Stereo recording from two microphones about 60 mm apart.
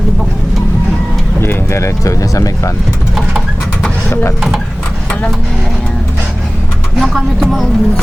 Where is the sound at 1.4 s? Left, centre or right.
Left.